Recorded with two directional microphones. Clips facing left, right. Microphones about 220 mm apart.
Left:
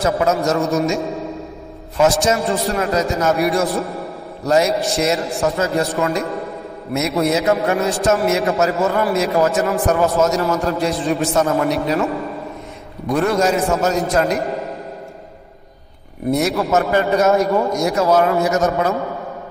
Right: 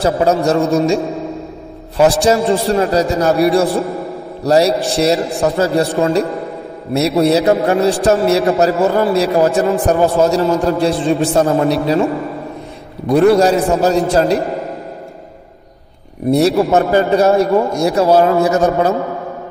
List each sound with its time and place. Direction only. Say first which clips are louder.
0.0 s a man's voice: right 4 dB; 30° right (ahead or behind)
16.3 s a man's voice: right 6 dB; 30° right (ahead or behind)